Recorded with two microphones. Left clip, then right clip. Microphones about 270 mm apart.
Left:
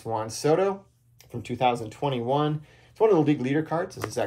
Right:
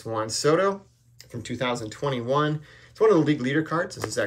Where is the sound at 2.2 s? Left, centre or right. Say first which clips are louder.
Right 3 dB; centre.